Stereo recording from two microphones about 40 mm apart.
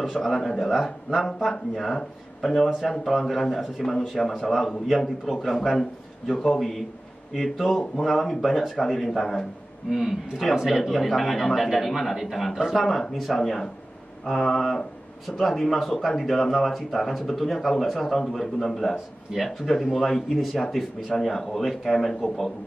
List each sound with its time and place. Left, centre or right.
0.2 s a man's voice: centre
9.8 s a man's voice: centre
10.8 s a man's voice: centre